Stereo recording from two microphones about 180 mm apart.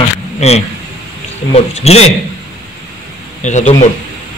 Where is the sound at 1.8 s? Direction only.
35° left (ahead or behind).